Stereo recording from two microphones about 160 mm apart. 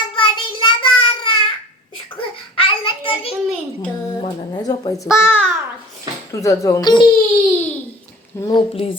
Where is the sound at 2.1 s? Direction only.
35° left (ahead or behind).